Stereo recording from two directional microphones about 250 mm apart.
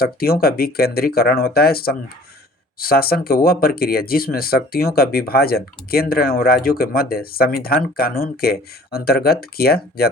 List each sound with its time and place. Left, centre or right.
0.0 s speech: left